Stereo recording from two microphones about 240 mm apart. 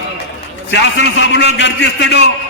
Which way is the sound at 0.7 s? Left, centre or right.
Left.